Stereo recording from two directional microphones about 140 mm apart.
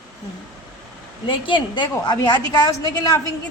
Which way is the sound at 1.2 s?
35° left (ahead or behind).